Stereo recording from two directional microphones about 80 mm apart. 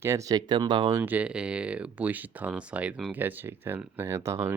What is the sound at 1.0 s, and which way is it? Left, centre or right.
Speech, centre.